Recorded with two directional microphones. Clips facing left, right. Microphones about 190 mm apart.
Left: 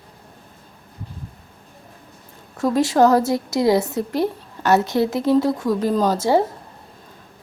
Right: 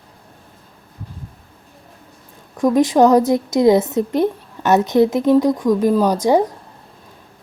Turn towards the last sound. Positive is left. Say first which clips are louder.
# right 3 dB
turn(degrees=-15)  # may be behind; listen again after turning